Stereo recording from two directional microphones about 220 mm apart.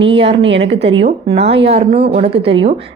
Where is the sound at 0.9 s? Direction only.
25° right (ahead or behind).